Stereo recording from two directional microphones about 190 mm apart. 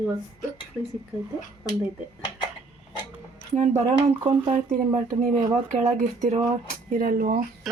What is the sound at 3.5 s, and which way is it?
Speech, 35° right (ahead or behind).